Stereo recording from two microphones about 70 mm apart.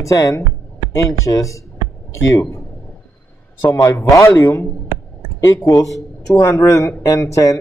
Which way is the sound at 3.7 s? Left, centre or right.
Left.